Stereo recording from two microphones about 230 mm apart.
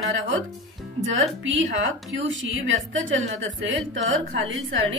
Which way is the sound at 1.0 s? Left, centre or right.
Right.